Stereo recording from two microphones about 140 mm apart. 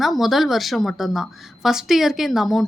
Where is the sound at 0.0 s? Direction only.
Centre (ahead or behind).